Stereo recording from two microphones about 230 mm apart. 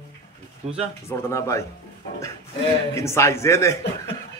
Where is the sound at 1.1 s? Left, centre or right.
Centre.